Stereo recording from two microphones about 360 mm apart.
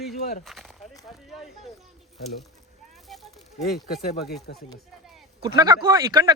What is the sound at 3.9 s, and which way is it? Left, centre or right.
Speech, centre.